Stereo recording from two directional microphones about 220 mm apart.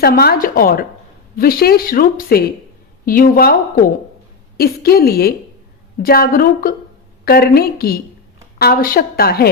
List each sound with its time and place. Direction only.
0.0 s a woman's voice: 45° left (ahead or behind)